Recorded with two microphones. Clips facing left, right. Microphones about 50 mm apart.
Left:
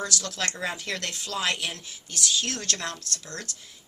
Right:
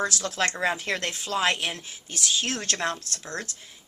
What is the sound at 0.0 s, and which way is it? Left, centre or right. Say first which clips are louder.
A woman's voice: right 4 dB; right.